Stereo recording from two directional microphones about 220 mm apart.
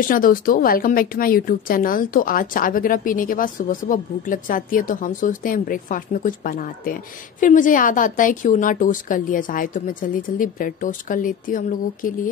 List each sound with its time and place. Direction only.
0.1 s speech: 40° left (ahead or behind)